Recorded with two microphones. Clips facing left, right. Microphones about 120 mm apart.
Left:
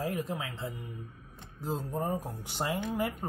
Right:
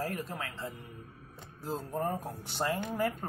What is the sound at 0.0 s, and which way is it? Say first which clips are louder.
Speech: left 3 dB; 15° left (ahead or behind).